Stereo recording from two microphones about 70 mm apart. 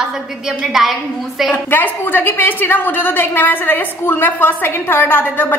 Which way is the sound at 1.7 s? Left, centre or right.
Left.